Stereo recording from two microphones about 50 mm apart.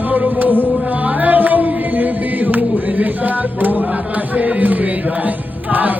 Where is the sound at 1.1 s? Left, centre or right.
Right.